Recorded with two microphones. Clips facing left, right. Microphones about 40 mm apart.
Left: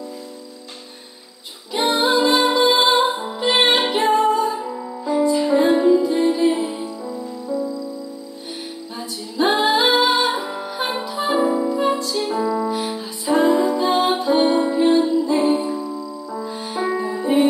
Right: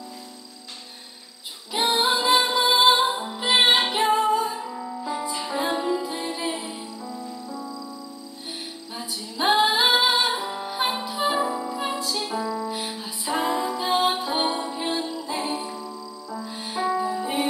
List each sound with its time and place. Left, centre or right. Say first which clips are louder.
1.7 s music: left 4 dB; centre
9.4 s music: left 3 dB; centre
11.4 s music: left 8 dB; centre
12.0 s music: left 5 dB; centre
12.4 s music: left 8 dB; centre
12.6 s music: left 7 dB; centre